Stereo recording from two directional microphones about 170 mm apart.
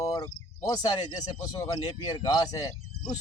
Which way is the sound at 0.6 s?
20° left (ahead or behind).